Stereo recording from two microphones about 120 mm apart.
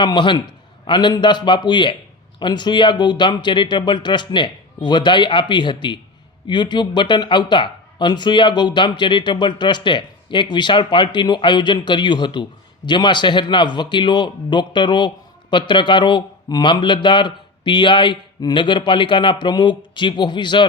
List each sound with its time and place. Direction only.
0.0 s speech: 40° left (ahead or behind)